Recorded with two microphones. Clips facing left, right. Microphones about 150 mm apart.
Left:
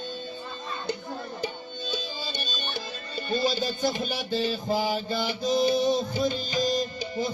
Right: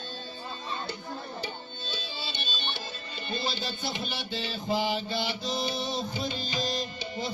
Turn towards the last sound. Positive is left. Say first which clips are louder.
# left 6 dB
turn(degrees=45)  # may be behind; listen again after turning